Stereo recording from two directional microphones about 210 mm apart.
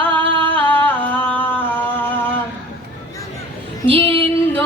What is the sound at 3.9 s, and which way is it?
Female singing, 25° right (ahead or behind).